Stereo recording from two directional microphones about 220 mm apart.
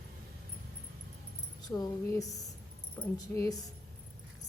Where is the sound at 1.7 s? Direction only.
10° left (ahead or behind).